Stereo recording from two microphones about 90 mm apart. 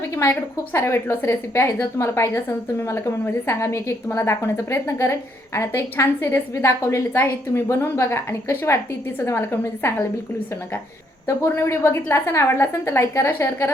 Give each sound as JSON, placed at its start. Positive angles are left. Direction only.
{"t": 0.2, "sound": "a woman's voice", "side_deg": 30}
{"t": 11.3, "sound": "a woman's voice", "side_deg": 30}